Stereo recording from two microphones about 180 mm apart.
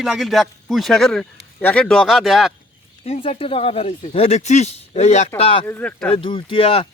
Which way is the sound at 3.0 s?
35° left (ahead or behind).